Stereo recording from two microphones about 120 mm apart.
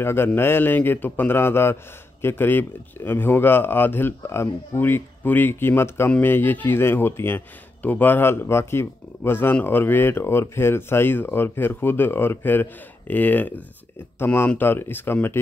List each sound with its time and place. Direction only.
0.0 s a man's voice: 20° left (ahead or behind)